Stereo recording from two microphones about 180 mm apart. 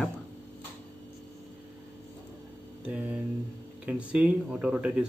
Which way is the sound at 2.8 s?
5° right (ahead or behind).